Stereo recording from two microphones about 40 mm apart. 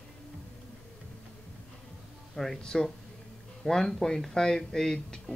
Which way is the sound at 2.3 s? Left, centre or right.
Centre.